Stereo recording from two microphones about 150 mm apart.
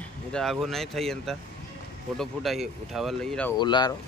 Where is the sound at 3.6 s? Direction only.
30° left (ahead or behind).